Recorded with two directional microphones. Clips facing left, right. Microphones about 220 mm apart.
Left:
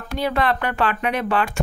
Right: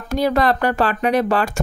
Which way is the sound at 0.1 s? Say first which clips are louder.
Right 4 dB; 40° right (ahead or behind).